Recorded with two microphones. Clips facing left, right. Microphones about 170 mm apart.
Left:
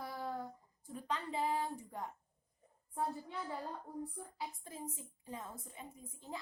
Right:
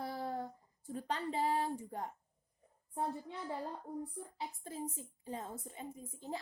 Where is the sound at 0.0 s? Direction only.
30° right (ahead or behind).